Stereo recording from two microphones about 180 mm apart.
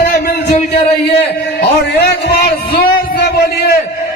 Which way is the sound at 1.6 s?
65° left (ahead or behind).